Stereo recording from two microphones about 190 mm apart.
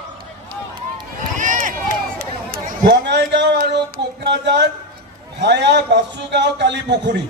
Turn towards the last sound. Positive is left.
turn(degrees=-65)  # may be behind; listen again after turning